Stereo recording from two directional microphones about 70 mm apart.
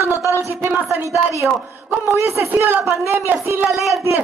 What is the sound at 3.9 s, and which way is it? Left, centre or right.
Speech, right.